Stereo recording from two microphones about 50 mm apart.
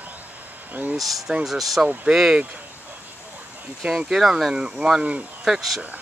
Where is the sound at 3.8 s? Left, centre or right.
Centre.